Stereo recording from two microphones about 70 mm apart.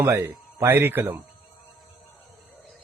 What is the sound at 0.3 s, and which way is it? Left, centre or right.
Speech, right.